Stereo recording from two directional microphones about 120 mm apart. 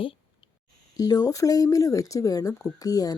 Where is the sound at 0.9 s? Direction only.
30° left (ahead or behind).